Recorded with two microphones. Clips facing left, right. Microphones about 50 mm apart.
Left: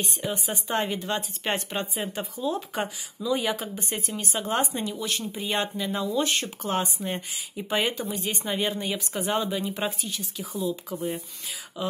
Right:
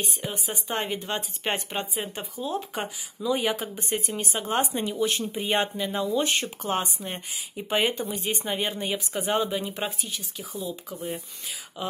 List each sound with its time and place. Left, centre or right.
0.0 s speech: centre
5.8 s speech: centre
11.8 s speech: centre